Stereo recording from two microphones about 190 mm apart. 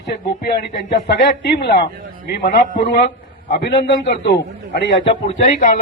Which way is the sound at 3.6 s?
65° left (ahead or behind).